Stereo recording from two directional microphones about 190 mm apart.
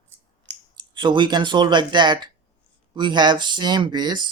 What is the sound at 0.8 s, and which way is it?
Speech, 25° right (ahead or behind).